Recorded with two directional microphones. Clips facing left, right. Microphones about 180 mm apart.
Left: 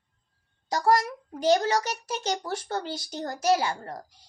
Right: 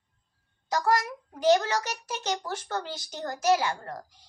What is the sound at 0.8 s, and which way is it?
Speech, 35° left (ahead or behind).